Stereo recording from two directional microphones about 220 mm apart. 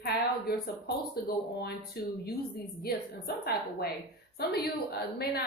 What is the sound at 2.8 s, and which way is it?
A woman's voice, 45° left (ahead or behind).